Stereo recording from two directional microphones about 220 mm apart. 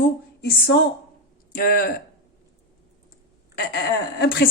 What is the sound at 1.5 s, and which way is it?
Speech, 40° left (ahead or behind).